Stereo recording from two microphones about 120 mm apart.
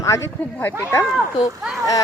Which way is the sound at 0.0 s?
25° left (ahead or behind).